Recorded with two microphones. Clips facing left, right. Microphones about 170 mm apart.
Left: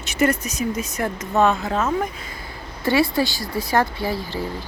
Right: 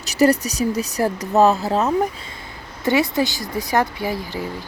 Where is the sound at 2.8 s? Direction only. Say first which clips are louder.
Right 1 dB; 20° right (ahead or behind).